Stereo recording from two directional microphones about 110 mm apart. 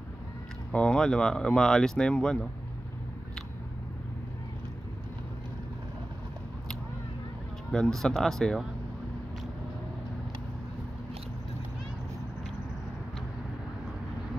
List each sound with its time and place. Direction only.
0.7 s speech: 10° left (ahead or behind)
7.7 s speech: 5° left (ahead or behind)